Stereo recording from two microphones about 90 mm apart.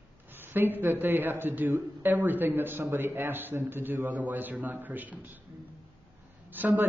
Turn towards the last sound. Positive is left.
turn(degrees=-20)  # may be behind; listen again after turning